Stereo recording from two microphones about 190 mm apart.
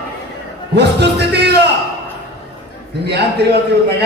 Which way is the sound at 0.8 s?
60° right (ahead or behind).